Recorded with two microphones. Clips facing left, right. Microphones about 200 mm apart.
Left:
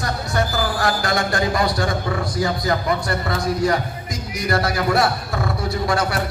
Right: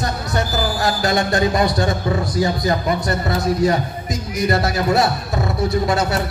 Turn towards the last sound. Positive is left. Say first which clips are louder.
# right 3 dB
turn(degrees=-20)  # may be behind; listen again after turning